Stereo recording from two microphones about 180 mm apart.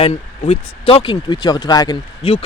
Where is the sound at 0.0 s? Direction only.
35° left (ahead or behind).